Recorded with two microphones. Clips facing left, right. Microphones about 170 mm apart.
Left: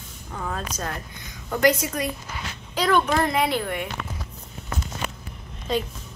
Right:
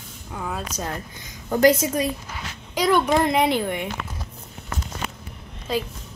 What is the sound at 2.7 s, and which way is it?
A woman's voice, 10° right (ahead or behind).